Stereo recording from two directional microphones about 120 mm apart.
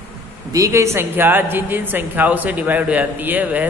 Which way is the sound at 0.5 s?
30° right (ahead or behind).